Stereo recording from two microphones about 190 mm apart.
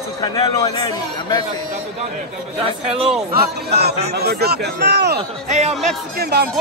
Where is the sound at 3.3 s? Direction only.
55° right (ahead or behind).